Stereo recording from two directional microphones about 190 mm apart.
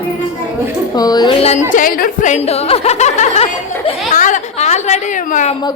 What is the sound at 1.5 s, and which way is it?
Speech, 45° left (ahead or behind).